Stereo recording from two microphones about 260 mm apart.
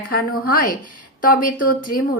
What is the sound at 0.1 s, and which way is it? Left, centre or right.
A woman's voice, left.